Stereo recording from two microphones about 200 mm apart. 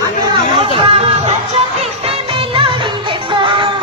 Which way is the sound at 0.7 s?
30° right (ahead or behind).